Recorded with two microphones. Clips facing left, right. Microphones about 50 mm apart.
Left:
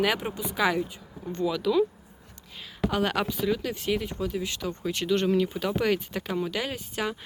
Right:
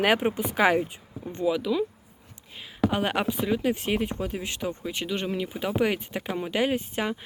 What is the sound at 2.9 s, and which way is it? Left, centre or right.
Speech, right.